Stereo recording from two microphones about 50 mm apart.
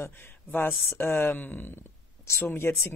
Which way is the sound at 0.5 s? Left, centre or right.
Left.